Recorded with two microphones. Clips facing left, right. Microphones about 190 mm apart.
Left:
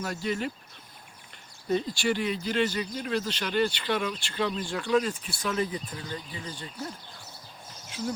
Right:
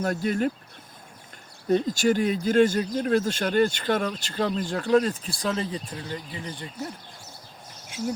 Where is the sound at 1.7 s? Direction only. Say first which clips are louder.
Right 5 dB; 45° right (ahead or behind); by 6.1 s 25° right (ahead or behind).